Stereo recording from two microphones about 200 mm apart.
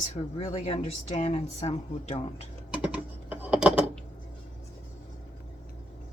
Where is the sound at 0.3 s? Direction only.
35° left (ahead or behind).